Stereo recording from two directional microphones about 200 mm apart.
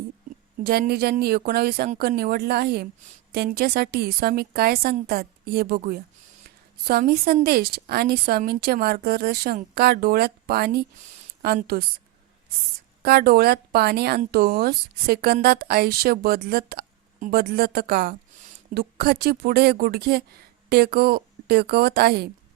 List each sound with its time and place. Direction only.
0.6 s a woman's voice: 50° right (ahead or behind)
13.0 s a woman's voice: 50° right (ahead or behind)